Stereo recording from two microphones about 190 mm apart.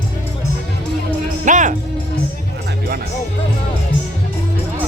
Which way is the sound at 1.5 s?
40° right (ahead or behind).